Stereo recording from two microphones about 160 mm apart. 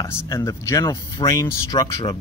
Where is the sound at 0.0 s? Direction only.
20° left (ahead or behind).